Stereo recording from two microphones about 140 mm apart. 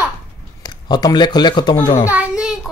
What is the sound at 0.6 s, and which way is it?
Speech, 30° left (ahead or behind).